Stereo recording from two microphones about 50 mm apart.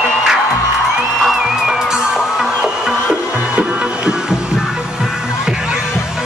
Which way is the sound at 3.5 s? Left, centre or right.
Right.